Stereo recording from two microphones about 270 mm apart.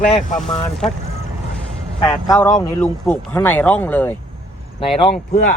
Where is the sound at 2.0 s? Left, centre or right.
Centre.